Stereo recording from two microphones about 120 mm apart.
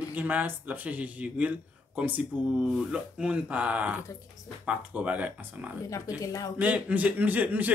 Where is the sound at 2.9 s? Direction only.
10° right (ahead or behind).